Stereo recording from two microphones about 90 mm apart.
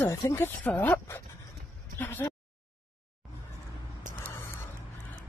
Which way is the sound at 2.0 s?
20° left (ahead or behind).